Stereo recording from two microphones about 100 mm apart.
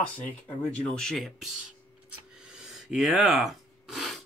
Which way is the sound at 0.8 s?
5° left (ahead or behind).